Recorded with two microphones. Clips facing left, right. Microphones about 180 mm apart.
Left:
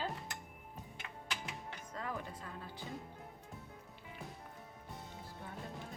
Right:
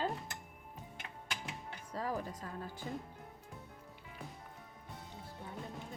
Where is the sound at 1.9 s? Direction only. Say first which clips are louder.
Right 5 dB; 35° right (ahead or behind).